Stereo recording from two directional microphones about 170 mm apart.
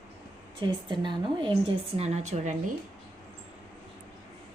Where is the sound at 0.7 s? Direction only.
25° right (ahead or behind).